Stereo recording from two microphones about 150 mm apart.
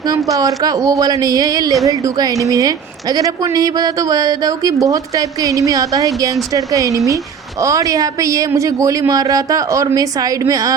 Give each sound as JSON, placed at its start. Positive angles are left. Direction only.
{"t": 0.3, "sound": "a woman's voice", "side_deg": -20}